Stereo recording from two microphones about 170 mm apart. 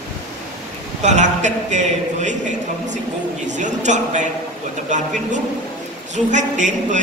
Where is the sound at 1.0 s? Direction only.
45° right (ahead or behind).